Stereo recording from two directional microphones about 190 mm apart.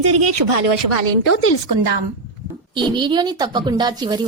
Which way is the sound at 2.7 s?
25° right (ahead or behind).